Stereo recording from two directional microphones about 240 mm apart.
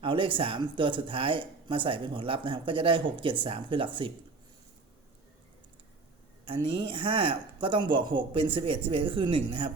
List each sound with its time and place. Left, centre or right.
0.0 s speech: right
6.4 s speech: right